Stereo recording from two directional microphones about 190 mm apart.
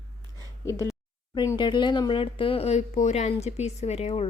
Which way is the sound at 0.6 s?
15° left (ahead or behind).